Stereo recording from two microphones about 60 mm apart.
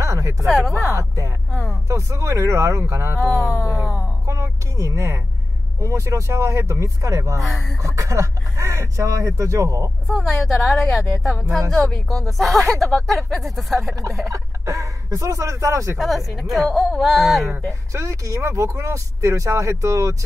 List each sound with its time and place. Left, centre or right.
0.0 s a sound: right
0.5 s speech: centre
0.9 s speech: right
1.5 s speech: centre
1.9 s speech: right
3.8 s a sound: centre
4.3 s speech: right
10.0 s speech: centre
11.4 s speech: right
11.8 s speech: centre
14.3 s speech: right
16.3 s speech: centre
17.9 s speech: right